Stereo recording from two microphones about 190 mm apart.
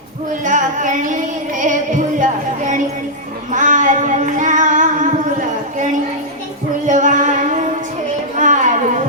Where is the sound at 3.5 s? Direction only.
40° right (ahead or behind).